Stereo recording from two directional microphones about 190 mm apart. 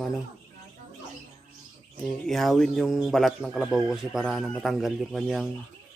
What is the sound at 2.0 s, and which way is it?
A man's voice, centre (ahead or behind).